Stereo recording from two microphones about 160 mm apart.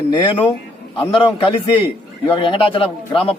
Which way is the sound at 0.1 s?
30° left (ahead or behind).